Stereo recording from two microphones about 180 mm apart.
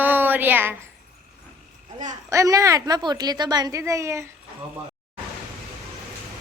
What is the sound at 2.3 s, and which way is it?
A woman's voice, 15° right (ahead or behind).